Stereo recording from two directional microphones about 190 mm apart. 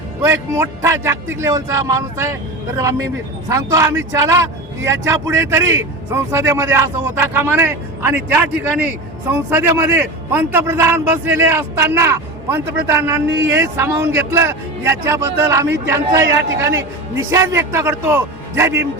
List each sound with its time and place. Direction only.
0.2 s a man's voice: 15° right (ahead or behind)
13.2 s speech: 75° right (ahead or behind)
13.5 s a man's voice: 15° right (ahead or behind)